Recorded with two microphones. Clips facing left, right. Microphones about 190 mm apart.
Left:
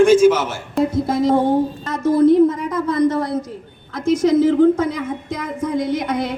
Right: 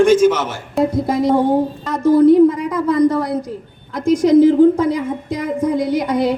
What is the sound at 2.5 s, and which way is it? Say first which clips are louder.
Speech: right 3 dB; 15° right (ahead or behind).